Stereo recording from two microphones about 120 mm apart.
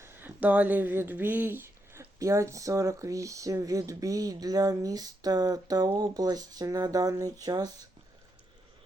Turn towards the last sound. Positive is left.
turn(degrees=-30)  # may be behind; listen again after turning